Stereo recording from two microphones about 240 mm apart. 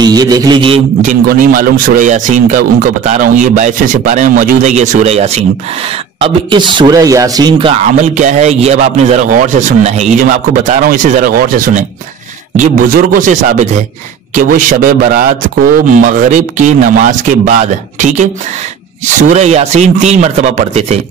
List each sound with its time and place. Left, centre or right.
0.0 s a man's voice: centre
8.1 s a man's voice: right